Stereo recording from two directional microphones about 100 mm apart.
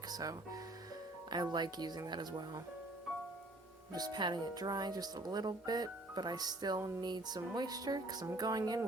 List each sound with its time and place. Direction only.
0.1 s speech: 40° right (ahead or behind)
3.9 s speech: 45° right (ahead or behind)